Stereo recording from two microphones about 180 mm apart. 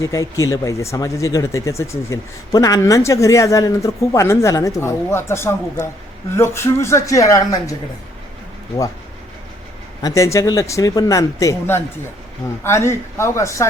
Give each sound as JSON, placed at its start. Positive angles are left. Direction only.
{"t": 0.0, "sound": "speech", "side_deg": 15}
{"t": 10.0, "sound": "speech", "side_deg": 20}